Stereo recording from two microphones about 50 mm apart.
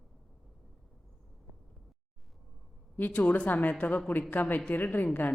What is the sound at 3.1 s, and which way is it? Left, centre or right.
A woman's voice, left.